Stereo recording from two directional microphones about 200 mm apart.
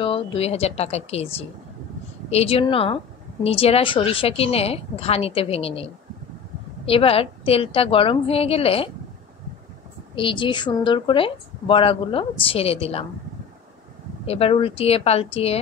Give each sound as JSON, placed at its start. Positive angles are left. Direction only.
{"t": 0.0, "sound": "a woman's voice", "side_deg": 25}
{"t": 2.3, "sound": "a woman's voice", "side_deg": 30}
{"t": 6.9, "sound": "a woman's voice", "side_deg": 30}
{"t": 10.1, "sound": "a woman's voice", "side_deg": 25}
{"t": 14.2, "sound": "a woman's voice", "side_deg": 30}